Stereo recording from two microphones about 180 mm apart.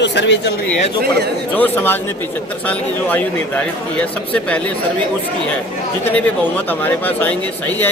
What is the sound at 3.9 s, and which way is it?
Speech, 5° left (ahead or behind).